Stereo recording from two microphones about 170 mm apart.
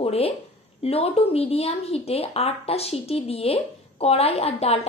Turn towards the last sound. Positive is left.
turn(degrees=35)  # may be behind; listen again after turning